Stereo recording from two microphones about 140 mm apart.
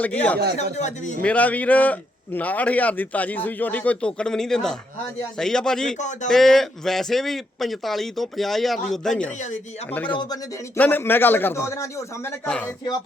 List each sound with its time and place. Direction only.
0.0 s a man's voice: 10° left (ahead or behind)
0.5 s speech: 55° left (ahead or behind)
1.2 s a man's voice: 10° left (ahead or behind)
6.0 s speech: 60° left (ahead or behind)
6.2 s a man's voice: centre (ahead or behind)
9.3 s speech: 60° left (ahead or behind)
10.1 s speech: 30° left (ahead or behind)
10.8 s a man's voice: 10° left (ahead or behind)
12.5 s a man's voice: 5° left (ahead or behind)